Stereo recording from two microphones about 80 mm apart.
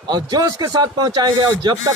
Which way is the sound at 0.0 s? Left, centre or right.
Right.